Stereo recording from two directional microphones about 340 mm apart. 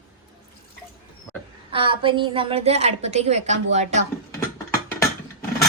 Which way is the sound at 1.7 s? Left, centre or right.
Centre.